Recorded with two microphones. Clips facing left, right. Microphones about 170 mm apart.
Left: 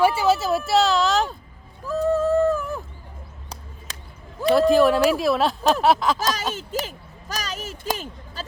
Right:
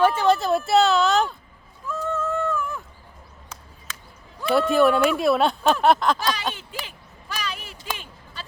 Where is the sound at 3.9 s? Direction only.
35° left (ahead or behind).